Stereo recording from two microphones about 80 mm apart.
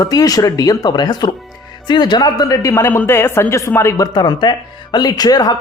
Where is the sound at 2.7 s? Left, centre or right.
Left.